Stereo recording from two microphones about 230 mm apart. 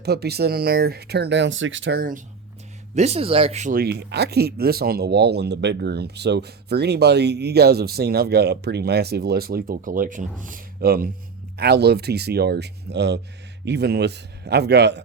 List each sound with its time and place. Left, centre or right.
0.0 s speech: right
2.9 s speech: right